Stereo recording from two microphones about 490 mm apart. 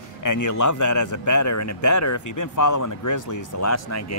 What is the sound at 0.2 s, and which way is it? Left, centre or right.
A man's voice, left.